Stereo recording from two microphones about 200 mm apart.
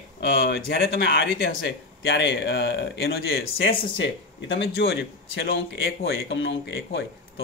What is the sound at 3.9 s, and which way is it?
Speech, 60° left (ahead or behind).